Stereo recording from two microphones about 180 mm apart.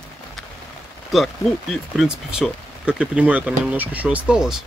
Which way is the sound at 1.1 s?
Centre (ahead or behind).